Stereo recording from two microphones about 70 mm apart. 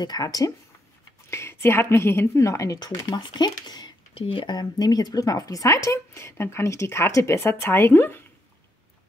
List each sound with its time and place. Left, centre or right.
0.0 s speech: left
1.3 s a woman's voice: left
3.2 s a woman's voice: left